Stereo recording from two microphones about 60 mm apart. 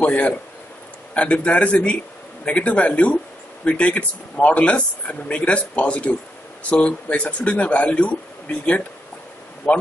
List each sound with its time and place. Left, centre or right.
0.0 s speech: left